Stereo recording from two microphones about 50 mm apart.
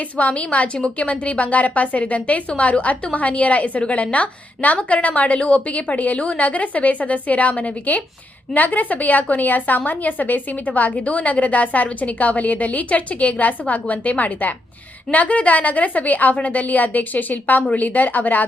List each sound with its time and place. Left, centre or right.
0.2 s a woman's voice: left